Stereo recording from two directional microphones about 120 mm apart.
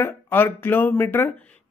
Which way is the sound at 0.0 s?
15° left (ahead or behind).